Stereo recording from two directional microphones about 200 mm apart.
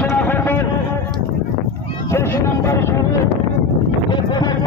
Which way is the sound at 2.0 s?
15° left (ahead or behind).